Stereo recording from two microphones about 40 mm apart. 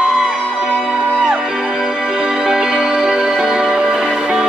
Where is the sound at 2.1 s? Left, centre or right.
Centre.